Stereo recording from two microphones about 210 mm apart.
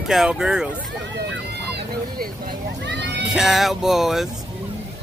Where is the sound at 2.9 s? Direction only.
55° right (ahead or behind).